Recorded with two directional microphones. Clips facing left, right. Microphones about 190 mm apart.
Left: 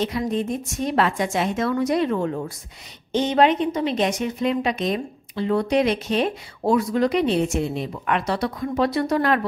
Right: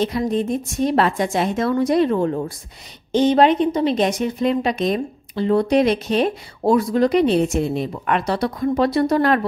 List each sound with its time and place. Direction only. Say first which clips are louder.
0.0 s a woman's voice: right 3 dB; 35° right (ahead or behind)